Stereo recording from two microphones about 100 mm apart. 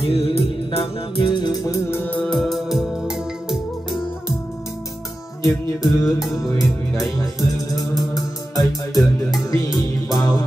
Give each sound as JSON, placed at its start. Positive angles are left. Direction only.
{"t": 0.0, "sound": "music", "side_deg": 80}
{"t": 1.9, "sound": "music", "side_deg": 25}
{"t": 2.2, "sound": "music", "side_deg": 0}
{"t": 5.4, "sound": "music", "side_deg": 35}